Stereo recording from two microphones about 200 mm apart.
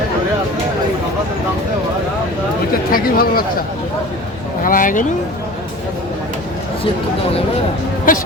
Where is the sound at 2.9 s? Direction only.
50° left (ahead or behind).